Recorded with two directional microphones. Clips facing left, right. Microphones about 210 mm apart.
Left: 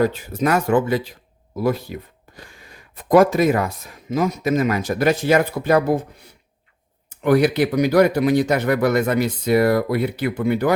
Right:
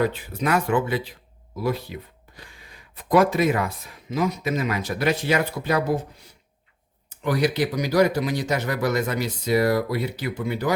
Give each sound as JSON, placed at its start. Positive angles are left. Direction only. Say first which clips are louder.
{"t": 0.0, "sound": "speech", "louder": "left 4 dB", "side_deg": 45}
{"t": 7.2, "sound": "speech", "louder": "left 6 dB", "side_deg": 60}